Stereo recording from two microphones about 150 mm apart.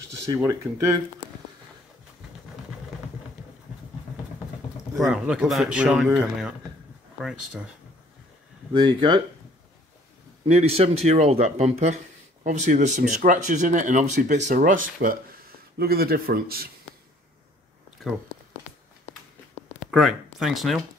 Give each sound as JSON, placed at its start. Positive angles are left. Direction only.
{"t": 0.4, "sound": "speech", "side_deg": -20}
{"t": 4.9, "sound": "a man's voice", "side_deg": 0}
{"t": 7.2, "sound": "a man's voice", "side_deg": 0}
{"t": 8.7, "sound": "speech", "side_deg": -30}
{"t": 10.5, "sound": "speech", "side_deg": -45}
{"t": 15.8, "sound": "a man's voice", "side_deg": -90}
{"t": 18.0, "sound": "speech", "side_deg": 0}
{"t": 19.8, "sound": "a sound", "side_deg": 0}
{"t": 20.3, "sound": "a man's voice", "side_deg": 0}